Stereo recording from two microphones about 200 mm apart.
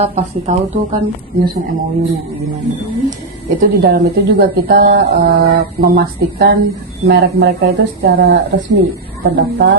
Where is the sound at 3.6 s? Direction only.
50° right (ahead or behind).